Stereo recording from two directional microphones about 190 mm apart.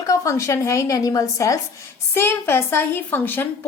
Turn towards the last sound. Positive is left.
turn(degrees=10)  # may be behind; listen again after turning